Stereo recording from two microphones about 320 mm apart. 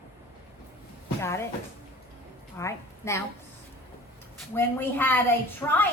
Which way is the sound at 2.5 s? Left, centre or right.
Centre.